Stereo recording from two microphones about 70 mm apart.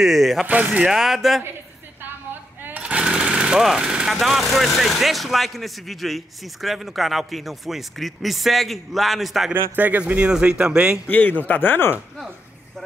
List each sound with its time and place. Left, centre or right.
0.0 s speech: centre
0.5 s speech: right
0.9 s speech: centre
2.6 s jackhammer: right
3.6 s speech: centre
9.5 s speech: right
11.1 s speech: left